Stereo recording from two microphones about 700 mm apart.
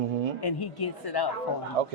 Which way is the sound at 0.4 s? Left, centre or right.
Left.